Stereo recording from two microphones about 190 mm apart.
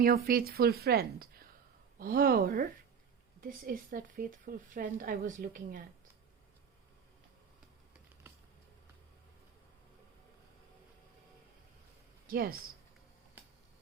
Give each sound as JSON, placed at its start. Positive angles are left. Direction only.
{"t": 0.0, "sound": "a woman's voice", "side_deg": -50}
{"t": 12.3, "sound": "a woman's voice", "side_deg": -50}